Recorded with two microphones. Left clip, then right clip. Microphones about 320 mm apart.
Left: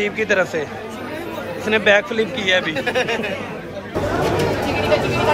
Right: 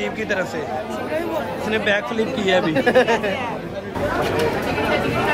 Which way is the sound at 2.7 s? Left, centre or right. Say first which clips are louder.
Right 4 dB; right.